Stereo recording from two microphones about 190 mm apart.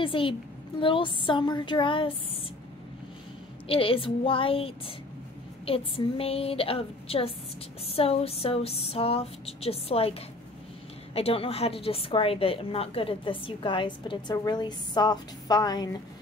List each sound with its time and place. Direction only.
0.0 s a woman's voice: 25° left (ahead or behind)
3.6 s a woman's voice: 30° left (ahead or behind)
7.8 s a sound: 30° left (ahead or behind)
11.1 s a woman's voice: 30° left (ahead or behind)